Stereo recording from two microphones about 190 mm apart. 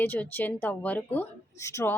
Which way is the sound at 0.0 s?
10° left (ahead or behind).